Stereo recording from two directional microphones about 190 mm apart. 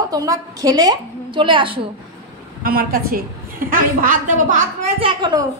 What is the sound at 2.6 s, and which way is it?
A woman's voice, 50° right (ahead or behind).